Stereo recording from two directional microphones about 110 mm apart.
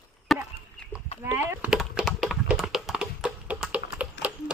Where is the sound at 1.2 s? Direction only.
20° right (ahead or behind).